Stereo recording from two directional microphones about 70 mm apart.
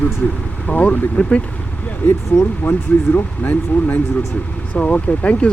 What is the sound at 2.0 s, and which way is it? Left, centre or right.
Speech, left.